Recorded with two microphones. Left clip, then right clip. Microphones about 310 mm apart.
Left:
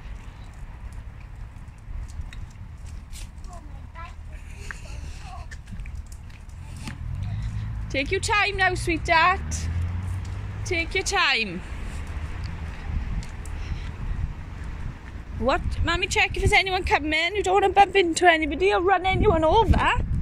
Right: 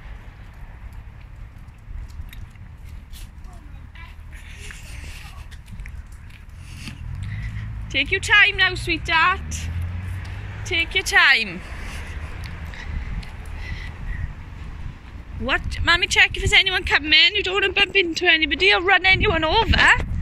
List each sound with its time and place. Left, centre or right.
4.5 s a sound: centre
7.9 s speech: centre
15.4 s speech: centre